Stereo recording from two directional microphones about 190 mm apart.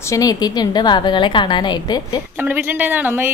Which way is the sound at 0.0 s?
20° left (ahead or behind).